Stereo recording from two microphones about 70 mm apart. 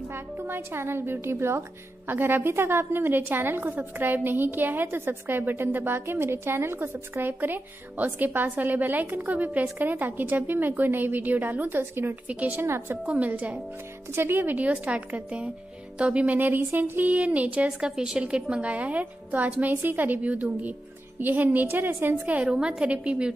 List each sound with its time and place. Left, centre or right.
0.1 s a woman's voice: right
12.3 s a woman's voice: right
12.6 s a woman's voice: right
13.0 s a woman's voice: centre
14.1 s a woman's voice: right; by 23.3 s centre